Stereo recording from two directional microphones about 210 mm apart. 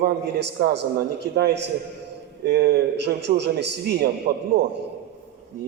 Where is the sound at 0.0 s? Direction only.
50° right (ahead or behind).